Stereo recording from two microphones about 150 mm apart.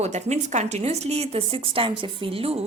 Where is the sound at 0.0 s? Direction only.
50° right (ahead or behind).